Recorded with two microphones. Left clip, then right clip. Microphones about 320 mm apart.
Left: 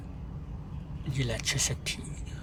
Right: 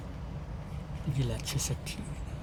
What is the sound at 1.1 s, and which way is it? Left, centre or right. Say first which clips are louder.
Speech: left 6 dB; left.